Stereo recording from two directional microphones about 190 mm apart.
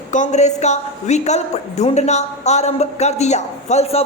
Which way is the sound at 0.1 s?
40° left (ahead or behind).